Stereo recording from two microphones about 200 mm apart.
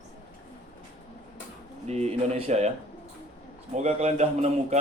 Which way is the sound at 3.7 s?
35° right (ahead or behind).